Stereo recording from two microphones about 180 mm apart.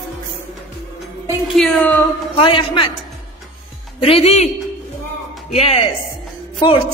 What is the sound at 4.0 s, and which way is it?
Speech, 35° left (ahead or behind).